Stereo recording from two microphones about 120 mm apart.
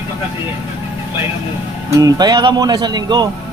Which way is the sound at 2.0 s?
30° right (ahead or behind).